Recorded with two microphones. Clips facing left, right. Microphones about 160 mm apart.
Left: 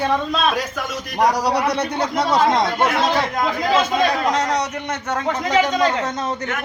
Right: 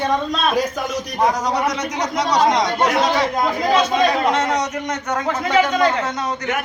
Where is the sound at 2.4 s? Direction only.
Centre (ahead or behind).